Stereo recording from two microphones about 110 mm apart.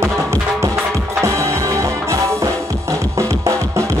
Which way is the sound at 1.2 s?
30° right (ahead or behind).